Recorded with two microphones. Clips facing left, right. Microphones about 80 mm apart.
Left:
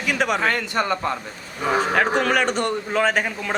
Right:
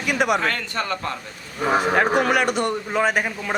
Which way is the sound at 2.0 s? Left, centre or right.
Centre.